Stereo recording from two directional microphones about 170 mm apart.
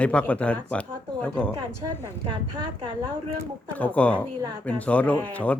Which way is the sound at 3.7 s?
10° left (ahead or behind).